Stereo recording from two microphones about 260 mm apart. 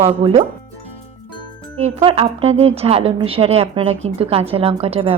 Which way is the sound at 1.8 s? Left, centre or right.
Right.